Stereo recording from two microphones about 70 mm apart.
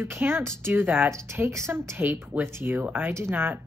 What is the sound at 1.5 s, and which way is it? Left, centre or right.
Speech, right.